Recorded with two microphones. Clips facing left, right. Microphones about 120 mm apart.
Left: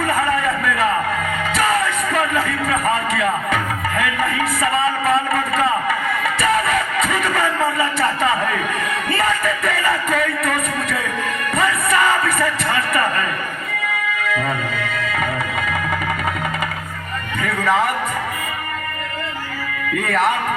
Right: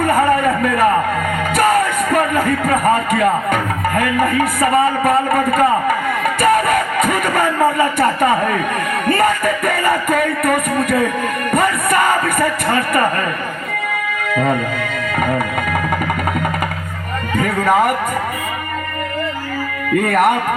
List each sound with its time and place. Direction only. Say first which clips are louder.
0.0 s a sound: right 5 dB; 50° right (ahead or behind)
1.5 s speech: right 5 dB; 50° right (ahead or behind)
6.2 s music: right 5 dB; 50° right (ahead or behind)
14.2 s music: right 8 dB; 50° right (ahead or behind)
17.3 s a man's voice: right 4 dB; 50° right (ahead or behind)
20.0 s music: right 5 dB; 50° right (ahead or behind)